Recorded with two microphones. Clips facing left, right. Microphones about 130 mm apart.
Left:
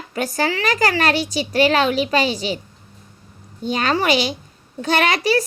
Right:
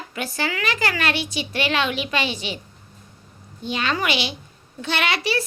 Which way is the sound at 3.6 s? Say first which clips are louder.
Left 5 dB; 40° left (ahead or behind).